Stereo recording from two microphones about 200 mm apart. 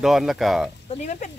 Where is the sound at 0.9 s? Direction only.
35° left (ahead or behind).